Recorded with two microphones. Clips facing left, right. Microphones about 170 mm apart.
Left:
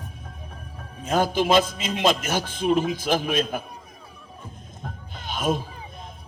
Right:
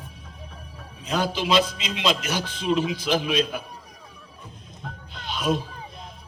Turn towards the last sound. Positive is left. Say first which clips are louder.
# even
turn(degrees=50)  # may be behind; listen again after turning